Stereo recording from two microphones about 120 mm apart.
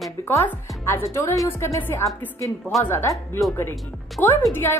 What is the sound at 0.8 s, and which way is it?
Speech, 20° left (ahead or behind).